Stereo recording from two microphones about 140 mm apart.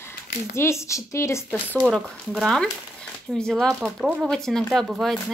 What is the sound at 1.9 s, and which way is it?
Speech, 5° left (ahead or behind).